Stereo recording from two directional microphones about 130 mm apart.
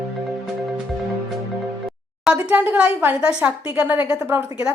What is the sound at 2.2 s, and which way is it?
A woman's voice, 10° right (ahead or behind).